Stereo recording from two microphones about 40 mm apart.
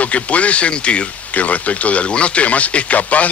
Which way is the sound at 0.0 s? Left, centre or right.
Left.